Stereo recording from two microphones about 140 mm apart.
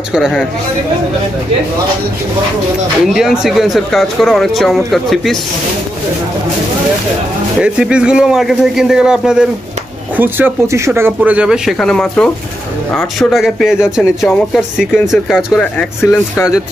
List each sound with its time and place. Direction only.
0.1 s speech: 5° right (ahead or behind)
3.1 s speech: centre (ahead or behind)
7.6 s speech: 5° right (ahead or behind)
16.0 s speech: 20° left (ahead or behind)